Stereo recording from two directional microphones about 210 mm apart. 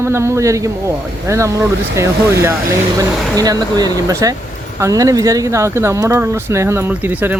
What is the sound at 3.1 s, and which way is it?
Speech, centre (ahead or behind).